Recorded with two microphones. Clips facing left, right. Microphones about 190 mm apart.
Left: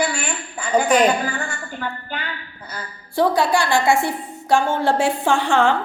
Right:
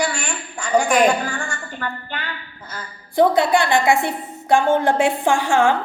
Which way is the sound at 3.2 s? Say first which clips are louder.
Right 2 dB; 20° right (ahead or behind).